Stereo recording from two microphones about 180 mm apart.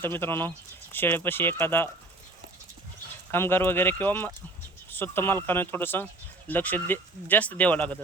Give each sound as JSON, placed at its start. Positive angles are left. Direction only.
{"t": 0.0, "sound": "speech", "side_deg": 10}
{"t": 3.3, "sound": "speech", "side_deg": 10}